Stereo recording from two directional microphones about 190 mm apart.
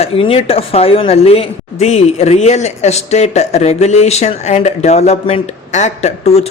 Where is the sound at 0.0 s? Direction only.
30° left (ahead or behind).